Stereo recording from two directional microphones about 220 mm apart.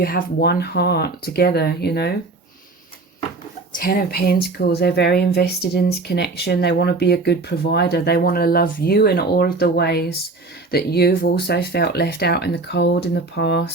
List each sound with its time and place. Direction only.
0.0 s speech: 40° left (ahead or behind)
3.8 s speech: 40° left (ahead or behind)